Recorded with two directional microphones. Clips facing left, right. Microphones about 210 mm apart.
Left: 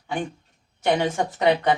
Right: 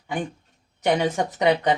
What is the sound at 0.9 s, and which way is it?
Speech, 15° right (ahead or behind).